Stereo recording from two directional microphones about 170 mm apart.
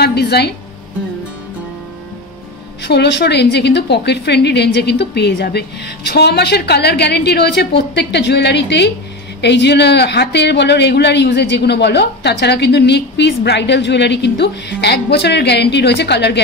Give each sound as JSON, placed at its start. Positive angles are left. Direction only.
{"t": 0.0, "sound": "music", "side_deg": 70}
{"t": 2.8, "sound": "a man's voice", "side_deg": 80}